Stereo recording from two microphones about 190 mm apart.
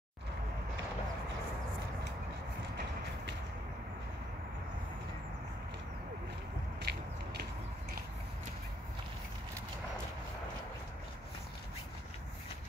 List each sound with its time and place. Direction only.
6.8 s biting: 60° right (ahead or behind)